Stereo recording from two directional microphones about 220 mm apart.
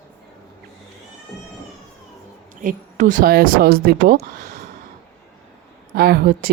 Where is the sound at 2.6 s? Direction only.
35° right (ahead or behind).